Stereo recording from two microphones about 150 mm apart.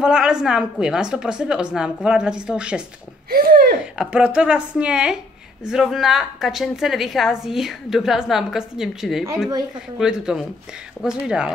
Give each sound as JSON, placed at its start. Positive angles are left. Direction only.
{"t": 0.0, "sound": "a woman's voice", "side_deg": -5}
{"t": 3.3, "sound": "a sound", "side_deg": -75}
{"t": 4.0, "sound": "a woman's voice", "side_deg": -10}